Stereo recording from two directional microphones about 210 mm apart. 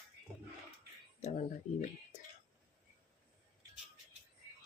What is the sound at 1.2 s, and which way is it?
Speech, 35° left (ahead or behind).